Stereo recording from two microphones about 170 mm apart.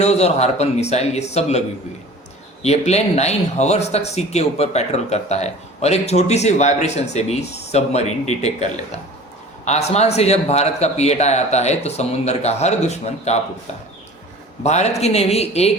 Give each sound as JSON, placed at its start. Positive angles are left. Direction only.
{"t": 0.0, "sound": "speech", "side_deg": 40}
{"t": 2.6, "sound": "speech", "side_deg": 40}
{"t": 14.6, "sound": "speech", "side_deg": 40}